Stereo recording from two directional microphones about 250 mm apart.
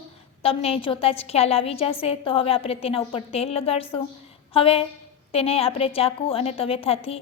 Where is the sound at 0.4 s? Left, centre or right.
Left.